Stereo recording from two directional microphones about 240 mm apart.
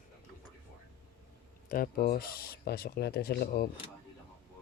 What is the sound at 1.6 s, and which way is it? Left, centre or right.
Speech, left.